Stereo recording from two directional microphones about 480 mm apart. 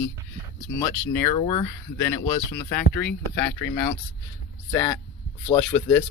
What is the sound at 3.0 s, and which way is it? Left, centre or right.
Speech, left.